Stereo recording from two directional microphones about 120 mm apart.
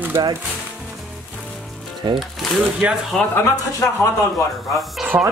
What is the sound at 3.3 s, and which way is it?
Speech, 25° left (ahead or behind).